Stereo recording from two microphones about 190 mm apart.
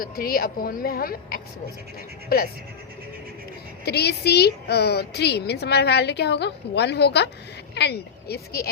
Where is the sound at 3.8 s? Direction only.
60° left (ahead or behind).